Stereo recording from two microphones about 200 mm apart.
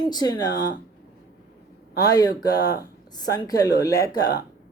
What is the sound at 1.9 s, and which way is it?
Speech, 20° left (ahead or behind).